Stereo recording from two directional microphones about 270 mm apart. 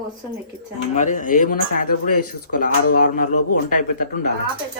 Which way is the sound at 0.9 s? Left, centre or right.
Left.